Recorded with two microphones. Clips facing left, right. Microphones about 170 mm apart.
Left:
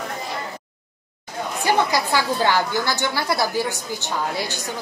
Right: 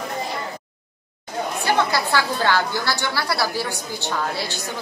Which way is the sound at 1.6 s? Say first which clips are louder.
Left 2 dB; 15° left (ahead or behind).